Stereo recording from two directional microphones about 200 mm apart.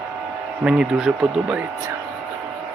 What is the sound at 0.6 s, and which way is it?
Speech, 5° right (ahead or behind).